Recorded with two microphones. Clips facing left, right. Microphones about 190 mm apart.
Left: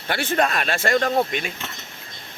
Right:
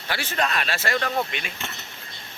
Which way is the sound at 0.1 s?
55° left (ahead or behind).